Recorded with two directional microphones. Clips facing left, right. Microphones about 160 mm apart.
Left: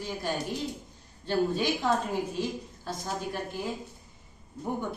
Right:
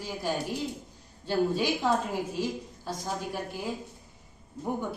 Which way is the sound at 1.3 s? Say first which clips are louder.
Even; 10° right (ahead or behind).